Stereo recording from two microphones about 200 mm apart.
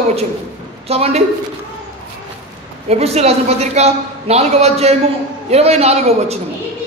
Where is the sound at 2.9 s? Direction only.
30° right (ahead or behind).